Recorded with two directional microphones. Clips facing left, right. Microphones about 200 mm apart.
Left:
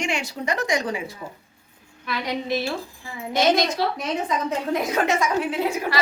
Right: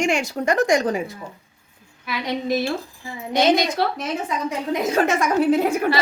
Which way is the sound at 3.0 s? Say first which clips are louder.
Right 3 dB; 20° right (ahead or behind).